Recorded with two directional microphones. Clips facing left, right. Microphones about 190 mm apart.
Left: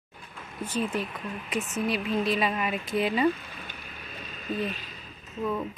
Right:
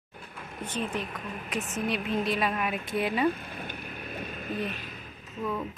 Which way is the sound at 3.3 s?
55° right (ahead or behind).